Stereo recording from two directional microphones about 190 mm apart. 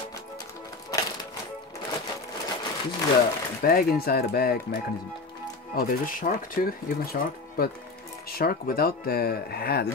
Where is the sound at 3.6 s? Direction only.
50° left (ahead or behind).